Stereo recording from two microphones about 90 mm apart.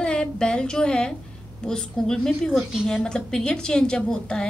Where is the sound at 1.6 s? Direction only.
10° left (ahead or behind).